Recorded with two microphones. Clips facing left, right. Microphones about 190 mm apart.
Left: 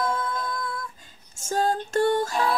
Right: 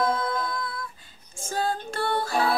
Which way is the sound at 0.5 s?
45° left (ahead or behind).